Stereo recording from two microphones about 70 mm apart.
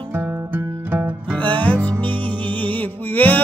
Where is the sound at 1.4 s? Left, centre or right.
Left.